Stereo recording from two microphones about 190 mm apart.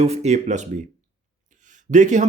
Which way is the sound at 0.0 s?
35° right (ahead or behind).